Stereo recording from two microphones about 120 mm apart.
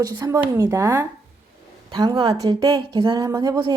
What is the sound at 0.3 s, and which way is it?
Speech, 20° right (ahead or behind).